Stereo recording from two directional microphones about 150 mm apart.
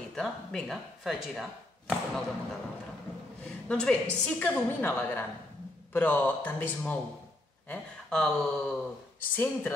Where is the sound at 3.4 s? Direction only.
5° left (ahead or behind).